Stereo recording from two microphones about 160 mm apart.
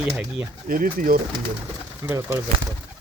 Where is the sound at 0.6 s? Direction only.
60° right (ahead or behind).